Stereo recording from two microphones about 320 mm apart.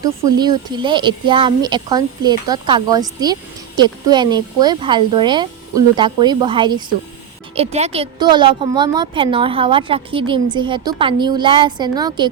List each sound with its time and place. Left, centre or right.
0.3 s a woman's voice: centre